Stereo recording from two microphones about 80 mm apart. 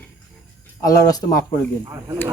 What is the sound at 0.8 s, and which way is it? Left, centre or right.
Speech, left.